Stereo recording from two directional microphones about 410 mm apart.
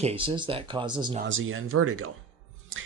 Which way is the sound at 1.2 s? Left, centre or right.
Right.